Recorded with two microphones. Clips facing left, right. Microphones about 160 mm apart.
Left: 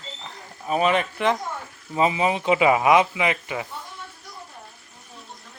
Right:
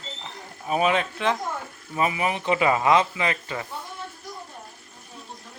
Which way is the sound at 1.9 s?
20° left (ahead or behind).